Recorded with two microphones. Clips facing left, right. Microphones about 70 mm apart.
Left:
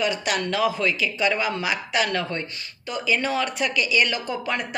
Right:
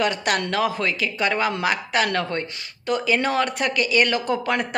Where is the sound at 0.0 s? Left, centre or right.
Right.